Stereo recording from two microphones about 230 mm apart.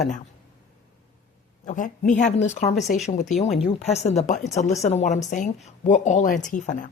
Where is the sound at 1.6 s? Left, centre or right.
Left.